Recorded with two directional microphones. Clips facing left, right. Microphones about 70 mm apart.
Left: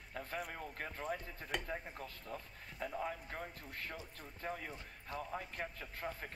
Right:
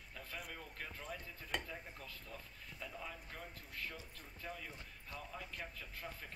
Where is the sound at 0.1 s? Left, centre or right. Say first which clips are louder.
Left 7 dB; left.